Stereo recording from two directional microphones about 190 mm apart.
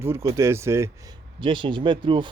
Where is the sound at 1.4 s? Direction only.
25° right (ahead or behind).